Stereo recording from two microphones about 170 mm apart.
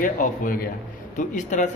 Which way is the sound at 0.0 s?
50° left (ahead or behind).